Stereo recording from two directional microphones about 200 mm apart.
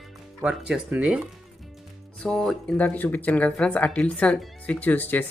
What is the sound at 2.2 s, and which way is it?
Speech, centre (ahead or behind).